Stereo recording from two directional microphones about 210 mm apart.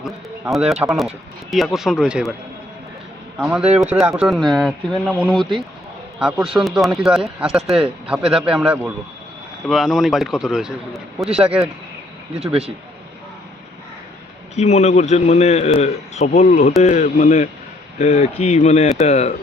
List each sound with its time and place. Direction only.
0.0 s speech: centre (ahead or behind)
3.3 s speech: 5° right (ahead or behind)
12.4 s speech: 30° right (ahead or behind)
14.5 s a man's voice: 30° left (ahead or behind)